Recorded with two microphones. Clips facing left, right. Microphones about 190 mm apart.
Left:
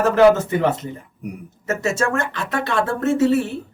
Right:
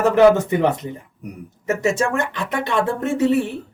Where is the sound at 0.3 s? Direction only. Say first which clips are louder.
Right 1 dB; 15° right (ahead or behind).